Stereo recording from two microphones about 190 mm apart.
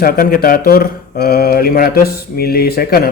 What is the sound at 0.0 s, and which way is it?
Speech, 50° left (ahead or behind).